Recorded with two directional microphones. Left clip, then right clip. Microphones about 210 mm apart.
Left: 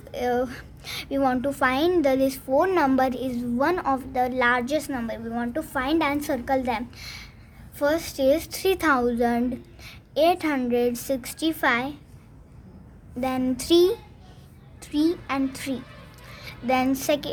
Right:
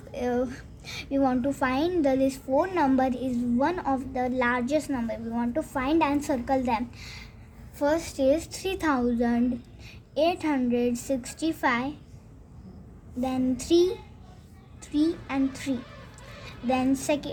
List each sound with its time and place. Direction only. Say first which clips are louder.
0.1 s a woman's voice: left 3 dB; 25° left (ahead or behind)
13.2 s a woman's voice: left 3 dB; 40° left (ahead or behind)